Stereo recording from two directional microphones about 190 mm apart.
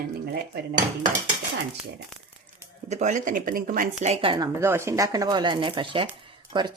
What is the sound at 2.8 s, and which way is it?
Speech, 35° right (ahead or behind).